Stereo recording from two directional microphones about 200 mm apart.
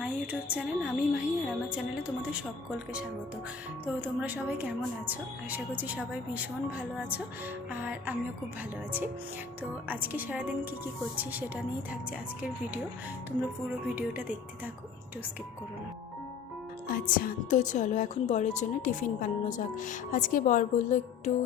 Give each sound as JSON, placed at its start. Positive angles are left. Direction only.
{"t": 0.0, "sound": "a woman's voice", "side_deg": -5}
{"t": 4.0, "sound": "a woman's voice", "side_deg": -10}
{"t": 9.9, "sound": "a woman's voice", "side_deg": -10}
{"t": 13.9, "sound": "a woman's voice", "side_deg": -5}
{"t": 16.9, "sound": "speech", "side_deg": 45}